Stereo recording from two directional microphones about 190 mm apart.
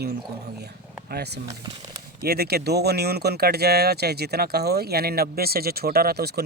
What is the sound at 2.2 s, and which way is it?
Speech, 55° right (ahead or behind).